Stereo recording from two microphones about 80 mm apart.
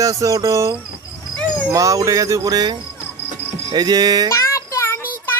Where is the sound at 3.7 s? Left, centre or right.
Right.